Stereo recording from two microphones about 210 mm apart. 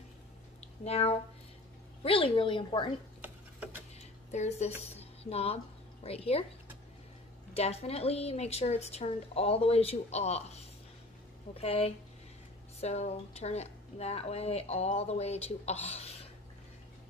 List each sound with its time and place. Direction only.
0.8 s speech: 30° left (ahead or behind)
3.2 s a sound: 10° right (ahead or behind)
4.3 s speech: 30° left (ahead or behind)
4.9 s music: 30° left (ahead or behind)
6.0 s speech: 30° left (ahead or behind)
7.5 s speech: 30° left (ahead or behind)